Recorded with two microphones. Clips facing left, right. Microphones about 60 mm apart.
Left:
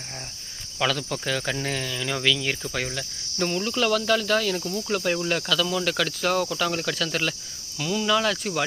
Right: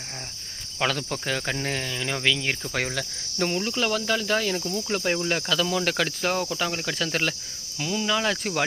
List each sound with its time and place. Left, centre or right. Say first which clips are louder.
0.8 s speech: left 1 dB; right
2.9 s cricket: right 2 dB; right
3.6 s speech: left 2 dB; centre
5.5 s speech: even; right; by 7.1 s centre
7.1 s speech: right 1 dB; right
7.8 s speech: left 2 dB; centre